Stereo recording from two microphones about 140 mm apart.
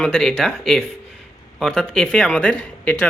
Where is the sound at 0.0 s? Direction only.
5° left (ahead or behind).